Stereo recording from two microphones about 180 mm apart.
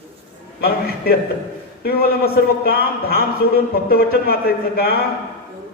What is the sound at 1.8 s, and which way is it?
Speech, 60° left (ahead or behind).